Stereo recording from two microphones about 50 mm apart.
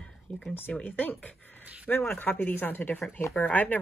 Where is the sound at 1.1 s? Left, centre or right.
Left.